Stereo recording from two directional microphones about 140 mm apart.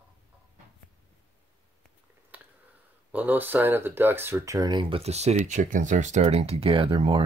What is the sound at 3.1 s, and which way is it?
Speech, 15° right (ahead or behind).